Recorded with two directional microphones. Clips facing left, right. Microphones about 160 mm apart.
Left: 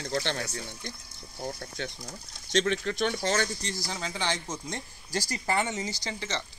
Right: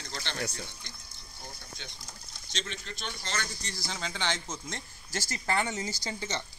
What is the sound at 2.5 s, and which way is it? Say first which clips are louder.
Speech: left 14 dB; 60° left (ahead or behind).